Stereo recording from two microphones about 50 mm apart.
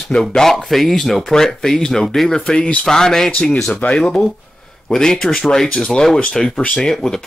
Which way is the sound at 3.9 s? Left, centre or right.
Centre.